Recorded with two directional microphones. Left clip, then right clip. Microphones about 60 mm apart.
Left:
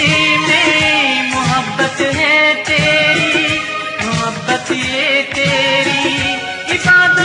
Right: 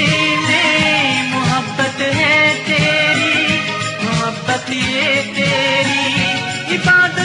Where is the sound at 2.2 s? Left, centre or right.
Left.